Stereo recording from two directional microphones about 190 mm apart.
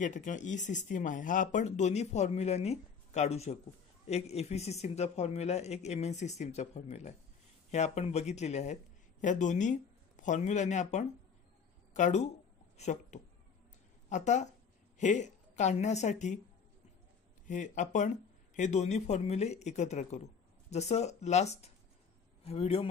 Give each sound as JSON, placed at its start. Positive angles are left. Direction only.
{"t": 0.0, "sound": "a woman's voice", "side_deg": 40}
{"t": 17.5, "sound": "speech", "side_deg": 40}